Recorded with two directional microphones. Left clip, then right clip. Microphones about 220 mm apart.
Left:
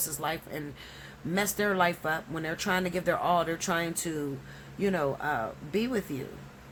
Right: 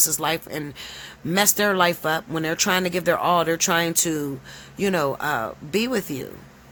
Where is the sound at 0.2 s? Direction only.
40° right (ahead or behind).